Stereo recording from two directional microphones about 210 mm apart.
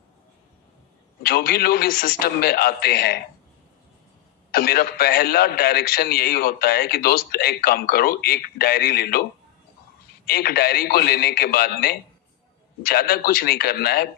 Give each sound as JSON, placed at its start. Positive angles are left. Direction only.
{"t": 1.2, "sound": "a man's voice", "side_deg": 45}
{"t": 4.5, "sound": "a man's voice", "side_deg": 45}
{"t": 10.2, "sound": "a man's voice", "side_deg": 45}